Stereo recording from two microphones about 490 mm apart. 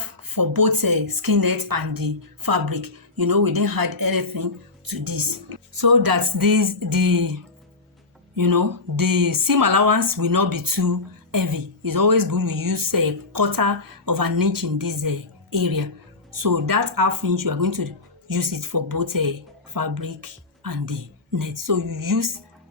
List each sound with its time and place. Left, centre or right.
0.3 s a woman's voice: right
8.4 s speech: right